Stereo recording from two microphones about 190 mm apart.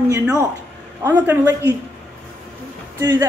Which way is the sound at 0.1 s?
15° right (ahead or behind).